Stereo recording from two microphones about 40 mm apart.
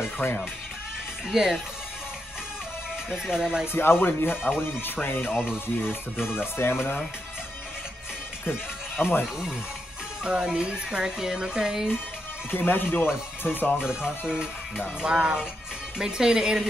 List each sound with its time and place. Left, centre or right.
0.2 s speech: left
1.3 s speech: centre
3.3 s speech: centre
3.6 s speech: left
5.3 s speech: centre
6.3 s speech: left
9.0 s speech: left
10.2 s speech: right
12.4 s speech: left
13.7 s speech: centre